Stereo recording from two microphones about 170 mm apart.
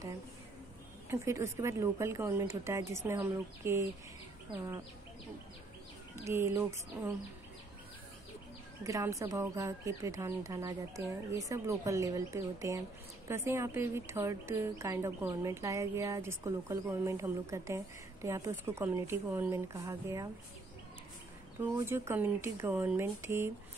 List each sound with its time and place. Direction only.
1.1 s speech: 15° right (ahead or behind)
6.2 s speech: 15° right (ahead or behind)
8.8 s speech: 20° right (ahead or behind)
21.5 s speech: 15° right (ahead or behind)